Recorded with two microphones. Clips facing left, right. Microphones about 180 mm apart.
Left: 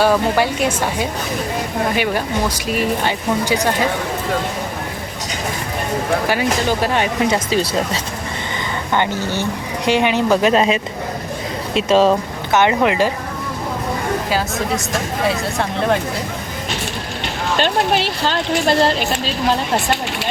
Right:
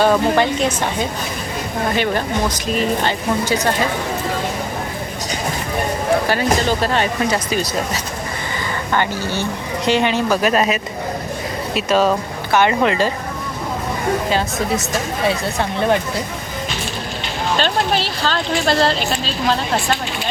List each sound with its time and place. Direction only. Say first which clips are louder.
0.0 s a woman's voice: right 1 dB; 10° left (ahead or behind)
2.6 s a woman's voice: right 1 dB; 10° left (ahead or behind)
6.2 s a woman's voice: even; 10° left (ahead or behind)
8.9 s a woman's voice: left 1 dB; 15° left (ahead or behind)
15.5 s speech: right 1 dB; centre (ahead or behind)
18.2 s a woman's voice: left 1 dB; 15° left (ahead or behind)